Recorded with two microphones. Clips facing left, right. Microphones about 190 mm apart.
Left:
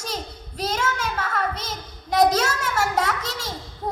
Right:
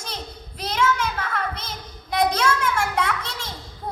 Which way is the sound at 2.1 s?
40° left (ahead or behind).